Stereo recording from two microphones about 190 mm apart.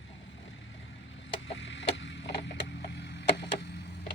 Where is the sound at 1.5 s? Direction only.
75° left (ahead or behind).